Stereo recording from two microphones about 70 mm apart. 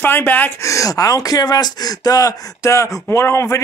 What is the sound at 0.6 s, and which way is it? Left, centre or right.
Speech, left.